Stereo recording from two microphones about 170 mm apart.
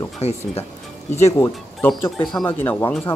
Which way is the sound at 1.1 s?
15° left (ahead or behind).